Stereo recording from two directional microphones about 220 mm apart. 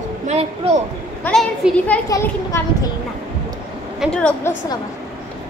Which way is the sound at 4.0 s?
5° left (ahead or behind).